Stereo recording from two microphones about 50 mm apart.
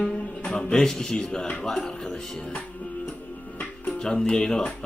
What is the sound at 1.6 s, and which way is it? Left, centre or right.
Speech, centre.